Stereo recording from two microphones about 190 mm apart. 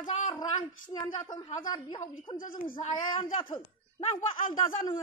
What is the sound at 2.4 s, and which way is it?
Speech, 45° left (ahead or behind).